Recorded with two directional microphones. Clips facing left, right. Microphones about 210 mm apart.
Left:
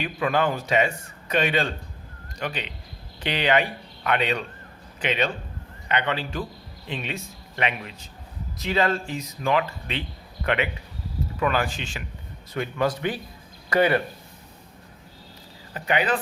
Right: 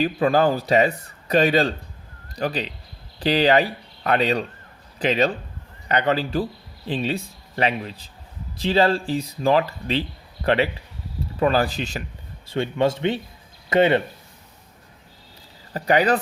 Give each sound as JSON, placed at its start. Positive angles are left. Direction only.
{"t": 0.0, "sound": "speech", "side_deg": -35}
{"t": 12.5, "sound": "a man's voice", "side_deg": -25}
{"t": 15.7, "sound": "speech", "side_deg": -40}